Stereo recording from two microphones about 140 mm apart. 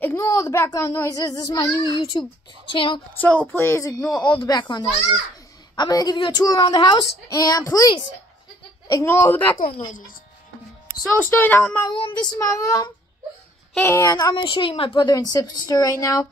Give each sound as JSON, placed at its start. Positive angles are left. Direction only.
{"t": 0.0, "sound": "a sound", "side_deg": 20}
{"t": 0.7, "sound": "a woman's voice", "side_deg": 25}
{"t": 3.2, "sound": "a woman's voice", "side_deg": 10}
{"t": 9.8, "sound": "speech", "side_deg": 70}
{"t": 11.1, "sound": "speech", "side_deg": 15}
{"t": 11.9, "sound": "a woman's voice", "side_deg": 35}